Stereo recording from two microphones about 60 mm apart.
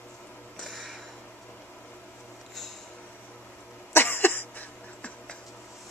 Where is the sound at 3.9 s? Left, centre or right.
Left.